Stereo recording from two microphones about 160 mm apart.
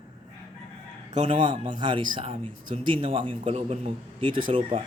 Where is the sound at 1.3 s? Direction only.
30° right (ahead or behind).